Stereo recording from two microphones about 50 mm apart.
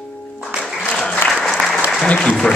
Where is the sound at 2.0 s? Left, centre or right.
Left.